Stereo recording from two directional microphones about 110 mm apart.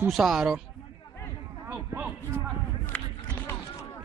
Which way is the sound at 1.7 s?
20° right (ahead or behind).